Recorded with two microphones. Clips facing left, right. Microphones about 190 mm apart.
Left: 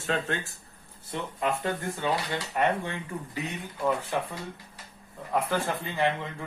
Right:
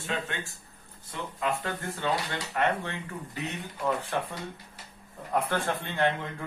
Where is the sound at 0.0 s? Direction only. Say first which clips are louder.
Left 4 dB; 40° left (ahead or behind).